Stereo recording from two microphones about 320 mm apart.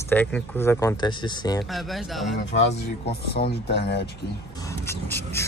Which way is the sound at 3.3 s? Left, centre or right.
Left.